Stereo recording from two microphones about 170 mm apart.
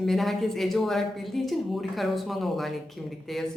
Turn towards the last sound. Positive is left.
turn(degrees=0)  # may be behind; listen again after turning